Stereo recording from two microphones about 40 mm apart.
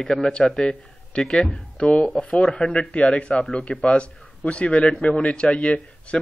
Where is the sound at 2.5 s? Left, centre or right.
Left.